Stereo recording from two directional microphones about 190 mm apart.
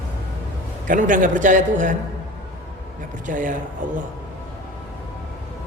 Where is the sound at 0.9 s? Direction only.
45° right (ahead or behind).